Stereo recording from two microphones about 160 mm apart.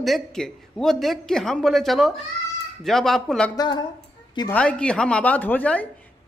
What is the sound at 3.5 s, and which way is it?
Speech, 25° left (ahead or behind).